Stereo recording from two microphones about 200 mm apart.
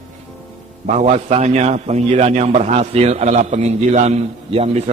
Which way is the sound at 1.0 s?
35° right (ahead or behind).